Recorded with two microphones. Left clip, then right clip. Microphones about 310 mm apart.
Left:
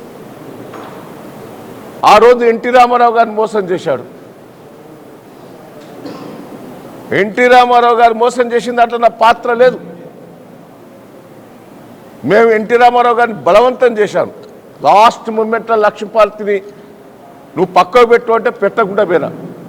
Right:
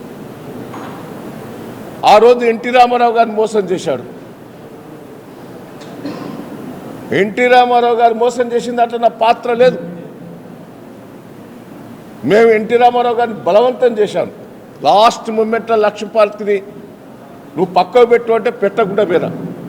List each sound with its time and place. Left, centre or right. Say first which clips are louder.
2.0 s a man's voice: left 2 dB; left
7.1 s a man's voice: left 2 dB; left
12.3 s a man's voice: left 1 dB; left
17.6 s a man's voice: left 2 dB; left